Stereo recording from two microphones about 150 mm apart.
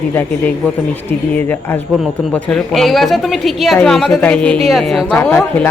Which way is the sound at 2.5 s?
Centre (ahead or behind).